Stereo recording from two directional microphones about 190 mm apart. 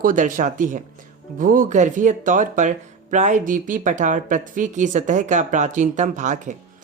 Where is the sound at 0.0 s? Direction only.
45° right (ahead or behind).